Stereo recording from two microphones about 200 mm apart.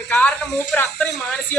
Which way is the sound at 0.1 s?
5° left (ahead or behind).